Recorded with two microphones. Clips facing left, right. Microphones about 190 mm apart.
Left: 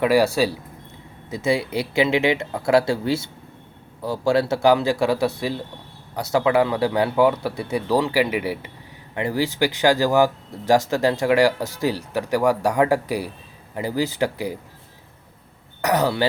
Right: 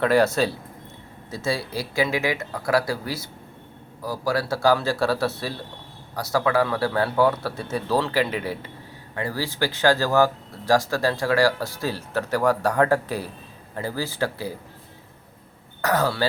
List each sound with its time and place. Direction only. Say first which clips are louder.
0.0 s speech: left 2 dB; 10° left (ahead or behind)
15.8 s speech: left 3 dB; 20° left (ahead or behind)